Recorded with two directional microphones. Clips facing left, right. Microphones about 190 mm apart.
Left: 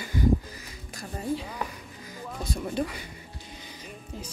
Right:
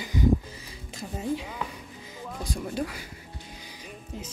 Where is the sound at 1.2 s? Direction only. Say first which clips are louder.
Even; 5° right (ahead or behind).